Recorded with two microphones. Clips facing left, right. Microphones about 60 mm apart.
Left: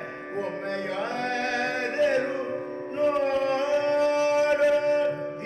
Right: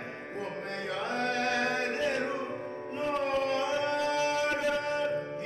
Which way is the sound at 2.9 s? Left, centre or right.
Left.